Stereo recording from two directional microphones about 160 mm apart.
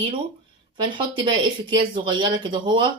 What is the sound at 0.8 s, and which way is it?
Speech, 30° right (ahead or behind).